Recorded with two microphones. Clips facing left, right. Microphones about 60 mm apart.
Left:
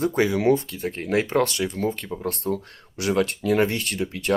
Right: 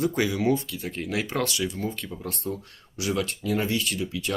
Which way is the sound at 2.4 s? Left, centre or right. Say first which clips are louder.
Left 6 dB; left.